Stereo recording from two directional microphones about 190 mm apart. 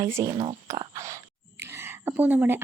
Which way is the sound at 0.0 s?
15° right (ahead or behind).